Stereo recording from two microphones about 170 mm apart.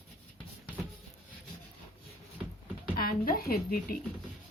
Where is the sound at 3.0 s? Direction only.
60° left (ahead or behind).